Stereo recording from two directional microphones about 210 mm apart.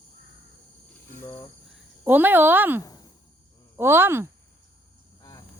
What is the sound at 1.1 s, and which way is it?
Cricket, 10° left (ahead or behind).